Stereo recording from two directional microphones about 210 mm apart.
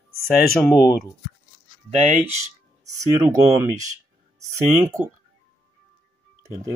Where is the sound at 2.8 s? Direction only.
15° right (ahead or behind).